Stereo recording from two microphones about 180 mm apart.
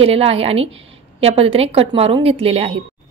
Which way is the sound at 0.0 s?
35° right (ahead or behind).